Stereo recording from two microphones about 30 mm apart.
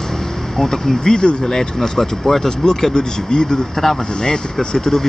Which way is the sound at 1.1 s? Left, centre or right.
Left.